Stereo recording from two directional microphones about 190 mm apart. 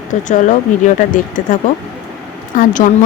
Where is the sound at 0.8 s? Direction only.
45° left (ahead or behind).